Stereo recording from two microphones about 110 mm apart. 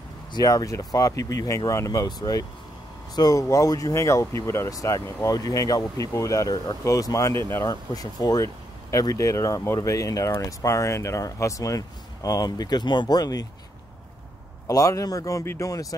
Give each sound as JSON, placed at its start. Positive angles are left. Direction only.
{"t": 0.3, "sound": "speech", "side_deg": 35}
{"t": 3.2, "sound": "speech", "side_deg": 30}
{"t": 14.7, "sound": "speech", "side_deg": 30}